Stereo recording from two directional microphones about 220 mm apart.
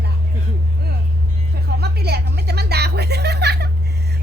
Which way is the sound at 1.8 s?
45° right (ahead or behind).